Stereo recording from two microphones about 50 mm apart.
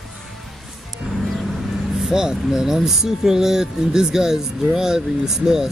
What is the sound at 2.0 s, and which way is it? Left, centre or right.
Speech, centre.